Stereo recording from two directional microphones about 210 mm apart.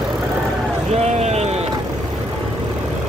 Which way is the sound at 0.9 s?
30° right (ahead or behind).